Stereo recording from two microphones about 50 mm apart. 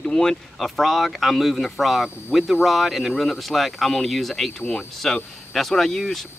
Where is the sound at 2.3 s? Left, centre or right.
Centre.